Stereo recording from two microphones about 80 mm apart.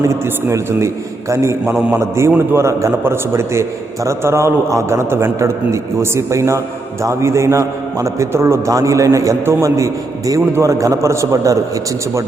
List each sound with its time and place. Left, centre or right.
0.0 s a man's voice: right